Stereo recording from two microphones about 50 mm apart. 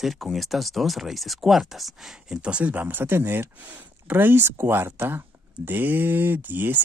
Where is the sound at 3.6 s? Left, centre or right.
Right.